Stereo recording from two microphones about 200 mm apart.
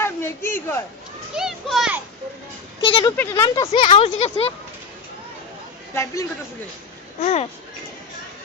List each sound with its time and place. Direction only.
0.0 s a sound: 10° left (ahead or behind)
1.4 s a child's voice: centre (ahead or behind)
2.8 s speech: 25° left (ahead or behind)
5.9 s a man's voice: 15° left (ahead or behind)
7.2 s speech: 35° left (ahead or behind)